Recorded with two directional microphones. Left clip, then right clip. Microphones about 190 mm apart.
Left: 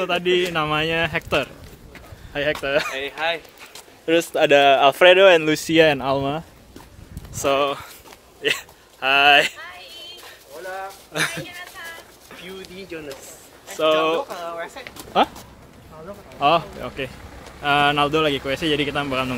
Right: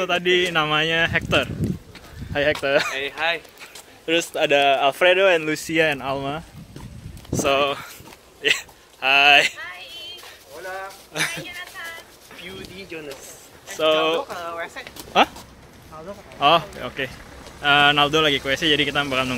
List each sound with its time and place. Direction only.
0.0 s speech: centre (ahead or behind)
2.6 s fowl: 50° right (ahead or behind)
3.0 s speech: 5° right (ahead or behind)
4.0 s speech: 40° left (ahead or behind)
7.4 s speech: 15° left (ahead or behind)
8.4 s speech: 30° left (ahead or behind)
9.6 s a sound: centre (ahead or behind)
11.4 s a sound: 5° left (ahead or behind)
12.4 s a sound: 60° left (ahead or behind)
12.9 s speech: 60° left (ahead or behind)
13.7 s speech: 10° left (ahead or behind)
16.3 s speech: centre (ahead or behind)